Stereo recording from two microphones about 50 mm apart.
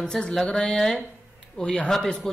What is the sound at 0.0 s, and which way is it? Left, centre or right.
Speech, centre.